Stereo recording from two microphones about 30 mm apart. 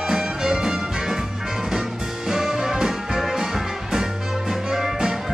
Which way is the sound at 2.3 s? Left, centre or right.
Centre.